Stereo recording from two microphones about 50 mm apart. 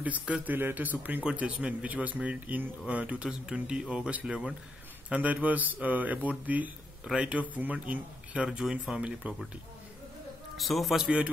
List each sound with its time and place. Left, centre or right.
0.0 s speech: right
1.2 s speech: right
4.1 s speech: right
8.5 s speech: centre
9.2 s speech: right
10.6 s speech: centre